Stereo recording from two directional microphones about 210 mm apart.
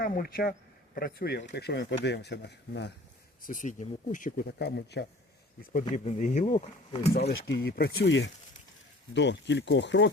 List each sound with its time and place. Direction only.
0.0 s speech: 45° left (ahead or behind)
3.4 s speech: 40° left (ahead or behind)
5.9 s speech: 35° left (ahead or behind)
7.1 s speech: 50° left (ahead or behind)